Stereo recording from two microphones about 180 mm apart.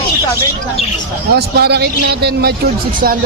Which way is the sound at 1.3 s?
65° right (ahead or behind).